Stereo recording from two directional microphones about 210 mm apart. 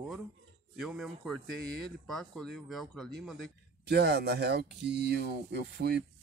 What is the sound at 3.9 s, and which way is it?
Speech, 50° right (ahead or behind).